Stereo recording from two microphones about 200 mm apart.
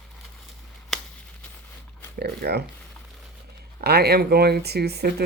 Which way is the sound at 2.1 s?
55° right (ahead or behind).